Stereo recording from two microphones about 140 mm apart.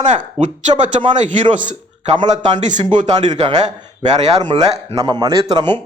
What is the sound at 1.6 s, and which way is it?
A man's voice, 60° right (ahead or behind).